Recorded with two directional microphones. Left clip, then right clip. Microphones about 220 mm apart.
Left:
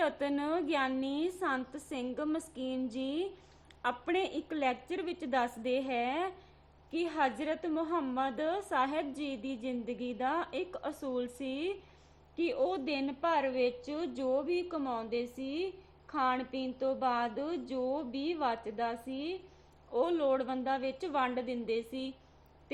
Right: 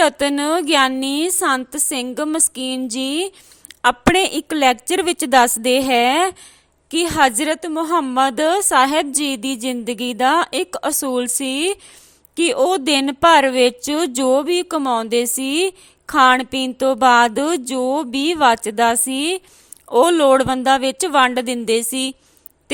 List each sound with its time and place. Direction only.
0.0 s a woman's voice: 45° right (ahead or behind)